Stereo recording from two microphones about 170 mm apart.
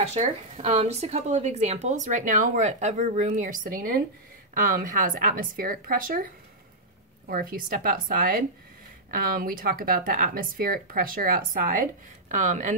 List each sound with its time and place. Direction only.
0.0 s speech: 40° right (ahead or behind)